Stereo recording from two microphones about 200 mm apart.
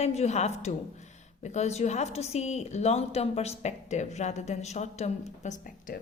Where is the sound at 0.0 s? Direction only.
35° left (ahead or behind).